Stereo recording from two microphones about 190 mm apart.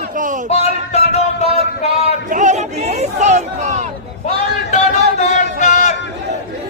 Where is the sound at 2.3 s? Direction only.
40° right (ahead or behind).